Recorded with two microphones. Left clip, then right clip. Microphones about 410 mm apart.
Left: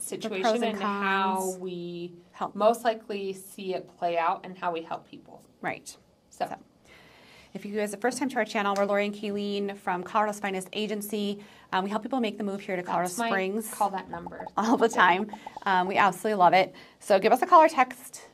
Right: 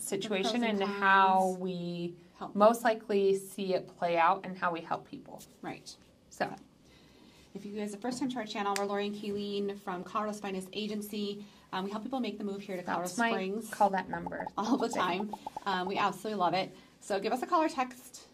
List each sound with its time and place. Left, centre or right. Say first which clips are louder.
0.1 s a woman's voice: left 5 dB; centre
7.7 s speech: left 10 dB; left
13.7 s a woman's voice: right 2 dB; centre
14.5 s speech: left 9 dB; left